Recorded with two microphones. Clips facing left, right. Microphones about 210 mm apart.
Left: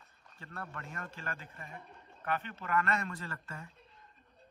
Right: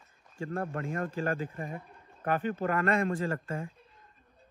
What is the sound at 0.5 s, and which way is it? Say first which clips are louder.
A man's voice: right 11 dB; 45° right (ahead or behind).